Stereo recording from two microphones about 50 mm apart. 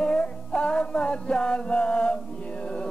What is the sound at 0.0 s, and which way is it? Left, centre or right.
Music, centre.